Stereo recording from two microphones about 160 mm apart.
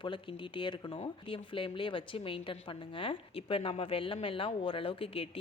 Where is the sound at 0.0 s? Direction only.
30° left (ahead or behind).